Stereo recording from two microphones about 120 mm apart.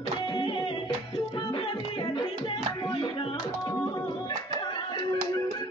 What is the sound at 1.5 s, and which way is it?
Music, 45° left (ahead or behind).